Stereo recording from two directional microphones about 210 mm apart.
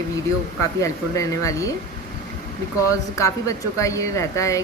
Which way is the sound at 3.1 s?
15° left (ahead or behind).